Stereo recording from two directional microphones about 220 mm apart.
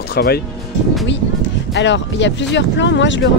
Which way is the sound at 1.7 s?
55° left (ahead or behind).